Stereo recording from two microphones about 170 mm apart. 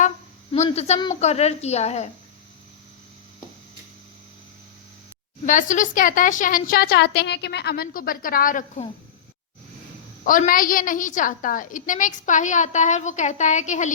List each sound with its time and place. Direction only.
0.5 s a woman's voice: 40° left (ahead or behind)
5.5 s a woman's voice: 50° left (ahead or behind)
10.2 s a woman's voice: 55° left (ahead or behind)